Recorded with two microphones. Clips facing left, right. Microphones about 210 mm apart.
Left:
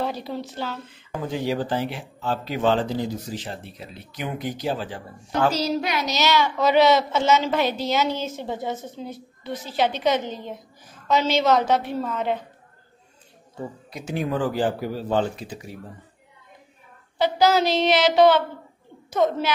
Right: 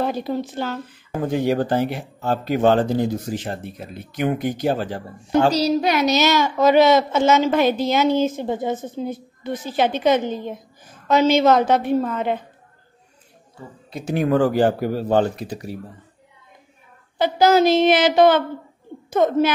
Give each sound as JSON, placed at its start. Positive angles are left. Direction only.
{"t": 0.0, "sound": "speech", "side_deg": -50}
{"t": 14.1, "sound": "speech", "side_deg": -65}
{"t": 14.7, "sound": "speech", "side_deg": -50}
{"t": 17.2, "sound": "a child's voice", "side_deg": -50}